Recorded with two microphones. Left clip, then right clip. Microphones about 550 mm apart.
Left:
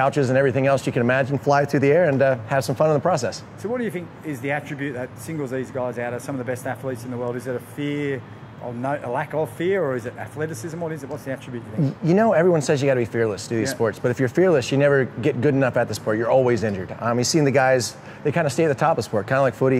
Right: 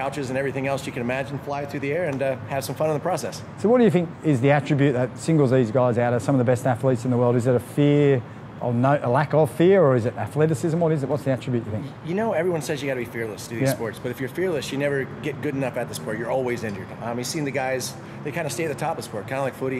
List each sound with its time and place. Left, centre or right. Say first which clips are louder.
0.0 s speech: left 7 dB; left
3.7 s speech: right 9 dB; right
12.1 s speech: left 6 dB; left